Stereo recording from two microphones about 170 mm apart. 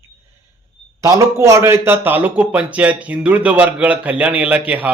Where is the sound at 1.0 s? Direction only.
20° right (ahead or behind).